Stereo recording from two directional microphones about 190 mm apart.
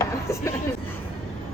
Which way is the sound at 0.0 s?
15° left (ahead or behind).